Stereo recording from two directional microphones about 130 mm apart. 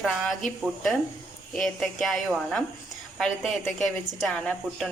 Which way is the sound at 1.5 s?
5° left (ahead or behind).